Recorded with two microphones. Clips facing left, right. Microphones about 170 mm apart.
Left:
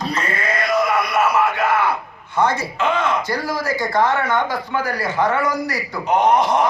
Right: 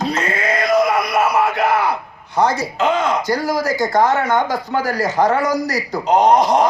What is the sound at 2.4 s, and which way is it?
A man's voice, 40° right (ahead or behind).